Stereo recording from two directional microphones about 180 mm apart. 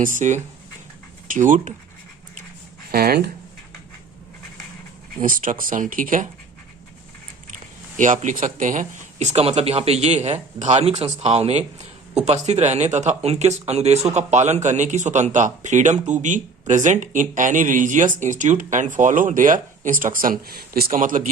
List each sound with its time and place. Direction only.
0.0 s speech: 45° right (ahead or behind)
2.9 s speech: 60° right (ahead or behind)
5.2 s speech: 50° right (ahead or behind)
7.9 s speech: 45° right (ahead or behind)